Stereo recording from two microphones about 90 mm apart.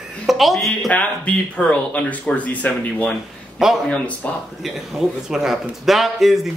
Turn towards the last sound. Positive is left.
turn(degrees=0)  # may be behind; listen again after turning